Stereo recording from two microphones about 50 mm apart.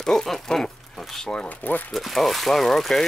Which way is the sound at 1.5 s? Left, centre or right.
Left.